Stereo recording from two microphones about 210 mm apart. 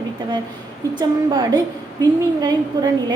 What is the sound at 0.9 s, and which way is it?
A woman's voice, 20° right (ahead or behind).